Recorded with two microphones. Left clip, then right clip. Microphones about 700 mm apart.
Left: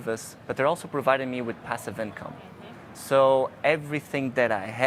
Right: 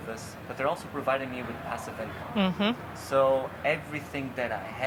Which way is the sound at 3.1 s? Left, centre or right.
Left.